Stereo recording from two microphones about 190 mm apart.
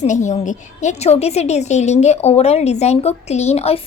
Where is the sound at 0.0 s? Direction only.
40° left (ahead or behind).